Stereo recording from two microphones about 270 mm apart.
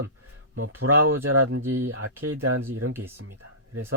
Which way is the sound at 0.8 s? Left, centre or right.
Right.